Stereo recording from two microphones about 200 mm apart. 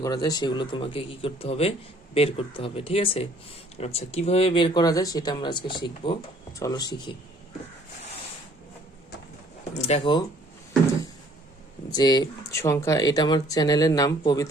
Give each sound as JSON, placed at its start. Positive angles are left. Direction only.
{"t": 0.0, "sound": "speech", "side_deg": 20}
{"t": 9.7, "sound": "speech", "side_deg": 30}
{"t": 11.9, "sound": "speech", "side_deg": 20}